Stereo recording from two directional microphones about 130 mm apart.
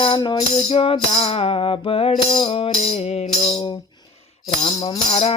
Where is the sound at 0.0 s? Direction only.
40° left (ahead or behind).